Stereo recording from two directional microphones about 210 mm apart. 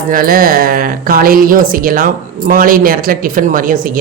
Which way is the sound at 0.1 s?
45° right (ahead or behind).